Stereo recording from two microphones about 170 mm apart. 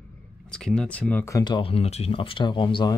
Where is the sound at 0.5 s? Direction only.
5° left (ahead or behind).